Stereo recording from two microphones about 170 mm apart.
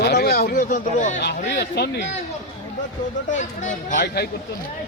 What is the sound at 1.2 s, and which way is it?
Speech, 75° left (ahead or behind).